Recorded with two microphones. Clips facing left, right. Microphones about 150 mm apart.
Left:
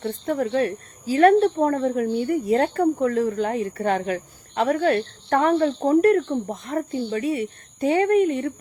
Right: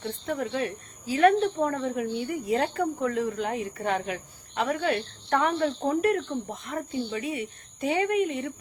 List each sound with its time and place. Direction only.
0.1 s speech: 40° left (ahead or behind)